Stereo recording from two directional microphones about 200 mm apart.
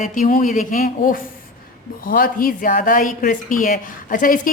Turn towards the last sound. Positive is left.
turn(degrees=40)  # may be behind; listen again after turning